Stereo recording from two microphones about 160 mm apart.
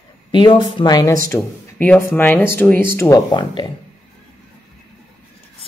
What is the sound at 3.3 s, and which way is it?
Speech, 30° left (ahead or behind).